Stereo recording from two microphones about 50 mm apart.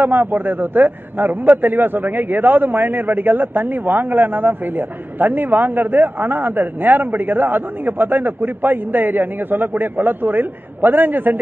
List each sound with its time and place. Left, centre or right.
0.0 s a man's voice: right